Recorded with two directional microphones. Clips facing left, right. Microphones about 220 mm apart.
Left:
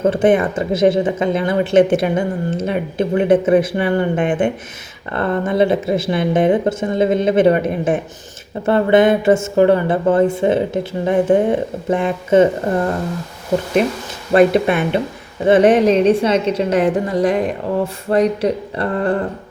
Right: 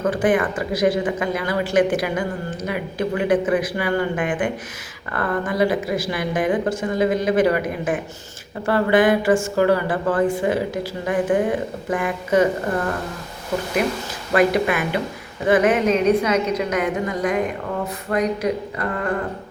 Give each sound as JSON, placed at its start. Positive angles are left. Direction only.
{"t": 0.0, "sound": "speech", "side_deg": 25}
{"t": 14.3, "sound": "a woman's voice", "side_deg": 25}